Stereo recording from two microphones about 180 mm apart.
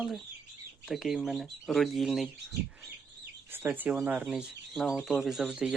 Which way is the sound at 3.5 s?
10° right (ahead or behind).